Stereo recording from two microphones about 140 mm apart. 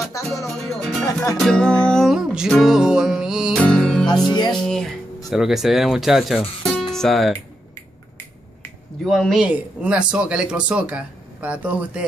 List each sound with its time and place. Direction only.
0.2 s music: 25° left (ahead or behind)
0.5 s music: centre (ahead or behind)
4.1 s music: 30° left (ahead or behind)
4.6 s speech: 5° left (ahead or behind)
9.0 s speech: centre (ahead or behind)